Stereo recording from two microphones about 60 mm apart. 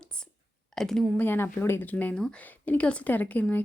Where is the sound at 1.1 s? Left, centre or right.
Left.